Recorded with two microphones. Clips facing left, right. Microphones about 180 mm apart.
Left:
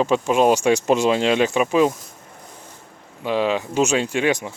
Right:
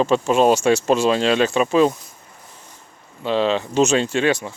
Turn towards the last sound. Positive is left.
turn(degrees=15)  # may be behind; listen again after turning